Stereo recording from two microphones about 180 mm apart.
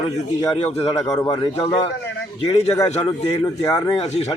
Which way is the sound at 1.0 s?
20° left (ahead or behind).